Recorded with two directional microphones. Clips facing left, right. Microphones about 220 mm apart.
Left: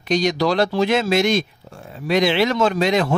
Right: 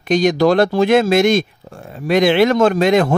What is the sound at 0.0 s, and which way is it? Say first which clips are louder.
Speech: right 5 dB; 50° right (ahead or behind).